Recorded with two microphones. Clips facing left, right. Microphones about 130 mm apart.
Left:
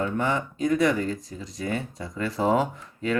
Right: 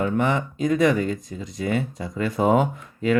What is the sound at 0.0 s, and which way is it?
Speech, 20° right (ahead or behind).